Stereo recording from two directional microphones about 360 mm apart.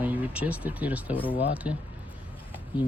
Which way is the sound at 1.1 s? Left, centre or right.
Centre.